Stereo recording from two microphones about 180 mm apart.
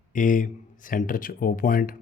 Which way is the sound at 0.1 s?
45° left (ahead or behind).